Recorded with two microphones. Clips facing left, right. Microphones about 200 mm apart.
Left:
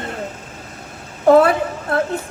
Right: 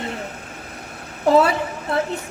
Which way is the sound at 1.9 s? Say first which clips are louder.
Left 2 dB; 55° left (ahead or behind).